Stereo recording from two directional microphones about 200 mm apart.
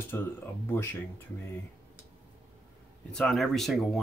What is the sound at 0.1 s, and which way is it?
Speech, 10° left (ahead or behind).